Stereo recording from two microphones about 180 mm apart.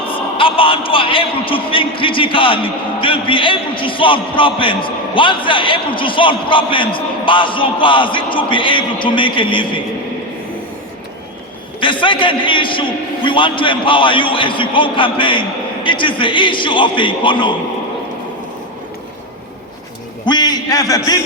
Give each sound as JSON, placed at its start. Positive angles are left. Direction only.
{"t": 0.1, "sound": "a man's voice", "side_deg": 30}
{"t": 11.8, "sound": "a man's voice", "side_deg": 30}
{"t": 20.2, "sound": "a man's voice", "side_deg": 25}